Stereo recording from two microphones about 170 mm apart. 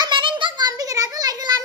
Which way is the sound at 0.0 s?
30° right (ahead or behind).